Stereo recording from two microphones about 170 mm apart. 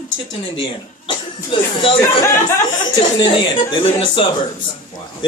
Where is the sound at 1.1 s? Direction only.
30° left (ahead or behind).